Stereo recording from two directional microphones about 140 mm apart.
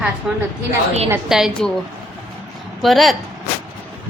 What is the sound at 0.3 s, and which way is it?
A woman's voice, 5° right (ahead or behind).